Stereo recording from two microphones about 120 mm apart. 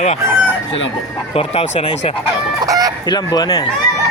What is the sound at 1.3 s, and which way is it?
Speech, 60° left (ahead or behind).